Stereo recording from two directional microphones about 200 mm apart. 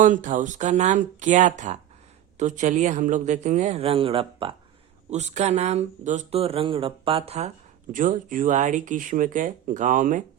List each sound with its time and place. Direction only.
0.0 s speech: 40° right (ahead or behind)
7.9 s speech: 40° right (ahead or behind)